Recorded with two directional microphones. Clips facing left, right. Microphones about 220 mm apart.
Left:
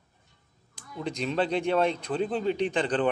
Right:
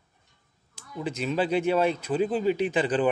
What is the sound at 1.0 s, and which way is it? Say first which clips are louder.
Speech: right 1 dB; 5° right (ahead or behind).